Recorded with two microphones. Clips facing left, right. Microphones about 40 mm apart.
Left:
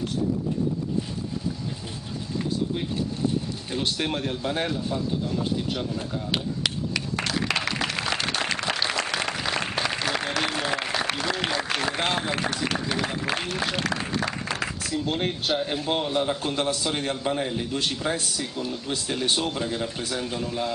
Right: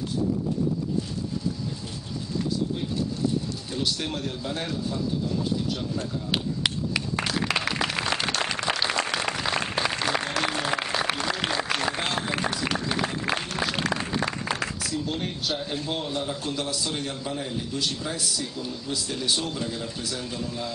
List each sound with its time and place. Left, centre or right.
3.7 s a man's voice: left
6.3 s a sound: centre
10.2 s applause: centre
12.8 s a man's voice: centre
13.5 s applause: centre
14.8 s a sound: centre
15.0 s a man's voice: left